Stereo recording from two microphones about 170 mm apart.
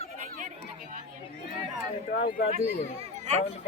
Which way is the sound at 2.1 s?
60° left (ahead or behind).